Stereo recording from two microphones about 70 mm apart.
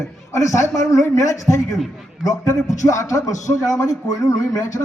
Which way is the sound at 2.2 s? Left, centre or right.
Left.